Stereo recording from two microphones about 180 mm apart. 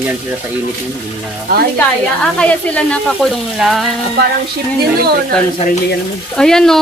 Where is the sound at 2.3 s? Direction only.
5° left (ahead or behind).